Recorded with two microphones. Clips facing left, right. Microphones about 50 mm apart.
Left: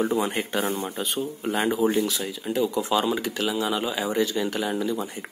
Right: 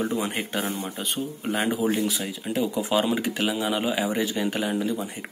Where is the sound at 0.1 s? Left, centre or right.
Centre.